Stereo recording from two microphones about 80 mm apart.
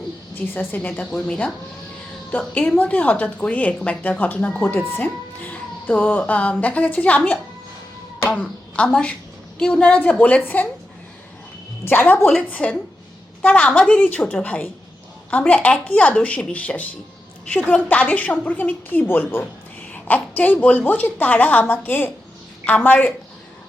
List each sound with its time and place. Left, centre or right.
0.5 s a woman's voice: left
8.7 s a woman's voice: centre
11.9 s a woman's voice: left